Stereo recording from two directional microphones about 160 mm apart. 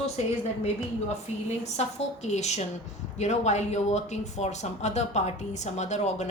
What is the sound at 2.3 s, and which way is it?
A woman's voice, 45° left (ahead or behind).